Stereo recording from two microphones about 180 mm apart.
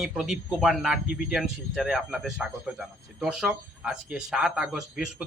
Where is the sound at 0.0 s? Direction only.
Centre (ahead or behind).